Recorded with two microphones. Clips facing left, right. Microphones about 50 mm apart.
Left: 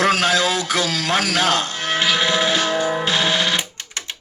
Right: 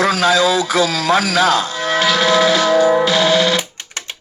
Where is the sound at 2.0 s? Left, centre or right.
Left.